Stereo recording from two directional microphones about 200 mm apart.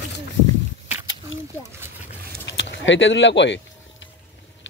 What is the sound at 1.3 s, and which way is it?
Speech, 75° left (ahead or behind).